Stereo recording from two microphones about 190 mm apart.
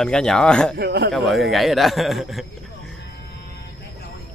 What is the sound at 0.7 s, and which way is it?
Speech, 60° right (ahead or behind).